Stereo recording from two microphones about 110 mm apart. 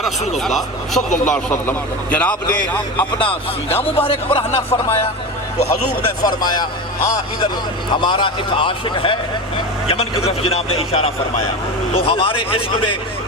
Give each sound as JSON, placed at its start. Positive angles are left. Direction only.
{"t": 0.3, "sound": "speech", "side_deg": 0}
{"t": 3.7, "sound": "speech", "side_deg": 20}
{"t": 4.0, "sound": "a man's voice", "side_deg": 60}
{"t": 6.2, "sound": "speech", "side_deg": 40}
{"t": 9.8, "sound": "a man's voice", "side_deg": 60}